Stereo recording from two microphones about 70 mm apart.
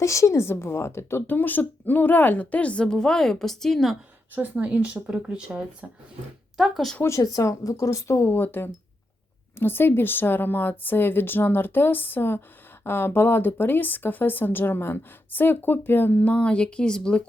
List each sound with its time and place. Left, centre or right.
0.0 s speech: left; by 3.9 s centre
4.4 s speech: right
6.6 s speech: centre
7.2 s speech: left; by 17.2 s centre